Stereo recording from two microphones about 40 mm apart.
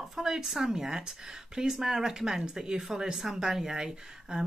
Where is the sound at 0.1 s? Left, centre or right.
Centre.